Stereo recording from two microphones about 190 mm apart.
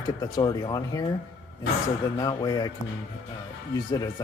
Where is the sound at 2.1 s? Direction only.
20° left (ahead or behind).